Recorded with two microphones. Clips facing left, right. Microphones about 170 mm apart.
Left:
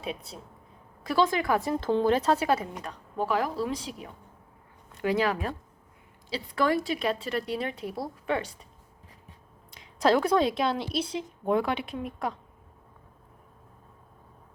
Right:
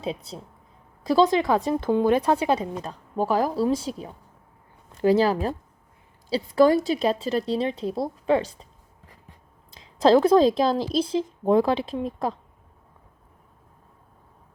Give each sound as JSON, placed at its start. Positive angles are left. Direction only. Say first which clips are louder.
{"t": 1.1, "sound": "a woman's voice", "louder": "right 5 dB", "side_deg": -25}
{"t": 9.7, "sound": "a woman's voice", "louder": "right 6 dB", "side_deg": -25}